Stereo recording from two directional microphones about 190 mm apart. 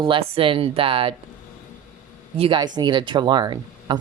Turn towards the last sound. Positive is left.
turn(degrees=-25)  # may be behind; listen again after turning